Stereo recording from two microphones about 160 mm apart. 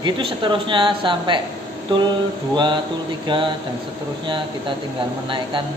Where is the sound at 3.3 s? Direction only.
30° right (ahead or behind).